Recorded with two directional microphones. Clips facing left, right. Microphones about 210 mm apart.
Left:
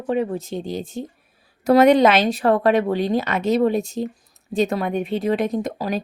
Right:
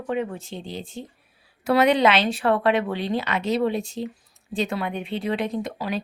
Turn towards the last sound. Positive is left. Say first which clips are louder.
# left 4 dB
turn(degrees=40)  # may be behind; listen again after turning